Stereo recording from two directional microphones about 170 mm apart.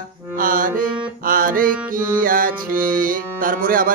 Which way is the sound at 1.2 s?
55° right (ahead or behind).